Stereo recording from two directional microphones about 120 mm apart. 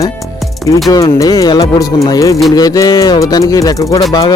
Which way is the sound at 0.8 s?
30° left (ahead or behind).